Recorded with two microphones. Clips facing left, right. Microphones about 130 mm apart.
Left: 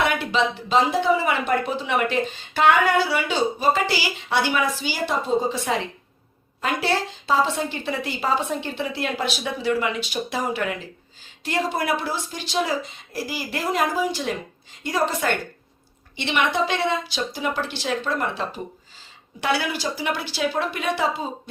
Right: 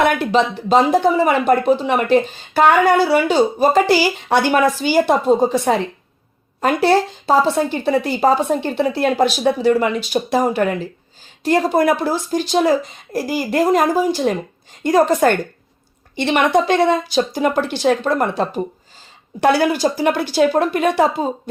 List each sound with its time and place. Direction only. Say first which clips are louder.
0.0 s a woman's voice: right 6 dB; 50° right (ahead or behind)